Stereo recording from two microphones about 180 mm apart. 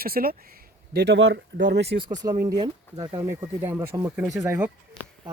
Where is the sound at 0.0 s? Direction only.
55° right (ahead or behind).